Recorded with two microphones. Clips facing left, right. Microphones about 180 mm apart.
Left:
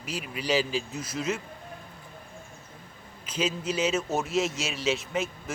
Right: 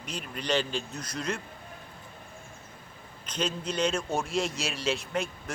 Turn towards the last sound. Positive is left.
turn(degrees=0)  # may be behind; listen again after turning